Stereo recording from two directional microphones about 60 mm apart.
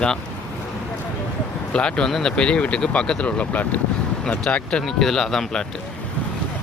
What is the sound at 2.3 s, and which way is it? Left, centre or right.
Speech, centre.